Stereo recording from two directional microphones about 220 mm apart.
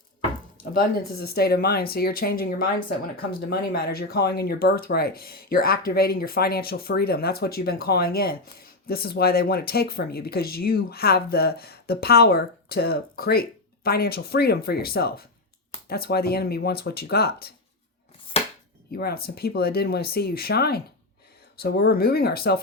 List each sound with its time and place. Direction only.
0.6 s speech: 40° left (ahead or behind)
18.3 s chopping: 25° left (ahead or behind)
18.9 s speech: 45° left (ahead or behind)